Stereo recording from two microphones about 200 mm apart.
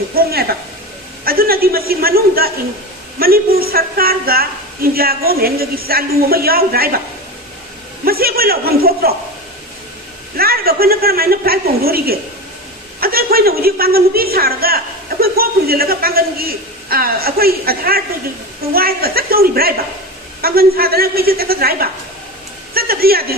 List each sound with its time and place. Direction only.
0.1 s a man's voice: 50° right (ahead or behind)
8.0 s a man's voice: 50° right (ahead or behind)
10.3 s a man's voice: 50° right (ahead or behind)